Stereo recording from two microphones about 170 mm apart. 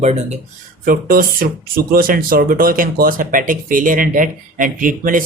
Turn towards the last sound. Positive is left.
turn(degrees=-55)  # may be behind; listen again after turning